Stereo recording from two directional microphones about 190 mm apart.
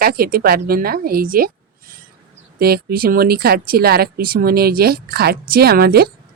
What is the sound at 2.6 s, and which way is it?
Speech, 55° right (ahead or behind).